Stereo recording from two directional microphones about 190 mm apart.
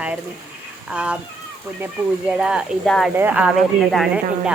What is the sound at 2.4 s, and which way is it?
Speech, 5° right (ahead or behind).